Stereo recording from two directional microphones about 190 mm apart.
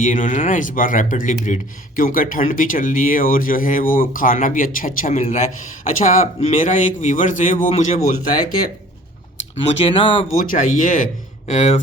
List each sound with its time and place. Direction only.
0.0 s a man's voice: 45° left (ahead or behind)
9.6 s speech: 30° left (ahead or behind)
10.3 s speech: 45° left (ahead or behind)